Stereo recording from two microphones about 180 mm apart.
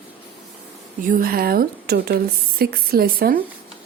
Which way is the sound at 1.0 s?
50° right (ahead or behind).